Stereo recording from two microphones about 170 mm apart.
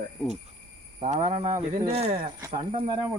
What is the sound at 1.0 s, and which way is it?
Speech, 40° right (ahead or behind).